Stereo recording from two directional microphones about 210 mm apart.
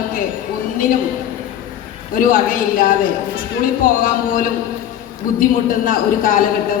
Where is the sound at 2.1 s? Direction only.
40° left (ahead or behind).